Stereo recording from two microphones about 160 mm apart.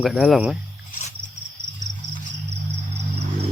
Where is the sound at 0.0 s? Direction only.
Centre (ahead or behind).